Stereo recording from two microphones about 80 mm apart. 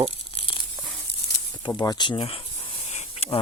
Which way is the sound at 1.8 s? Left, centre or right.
Left.